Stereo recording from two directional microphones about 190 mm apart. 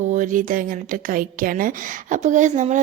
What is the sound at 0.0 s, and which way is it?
A woman's voice, 40° right (ahead or behind).